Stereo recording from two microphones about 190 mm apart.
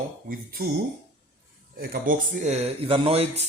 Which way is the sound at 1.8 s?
50° right (ahead or behind).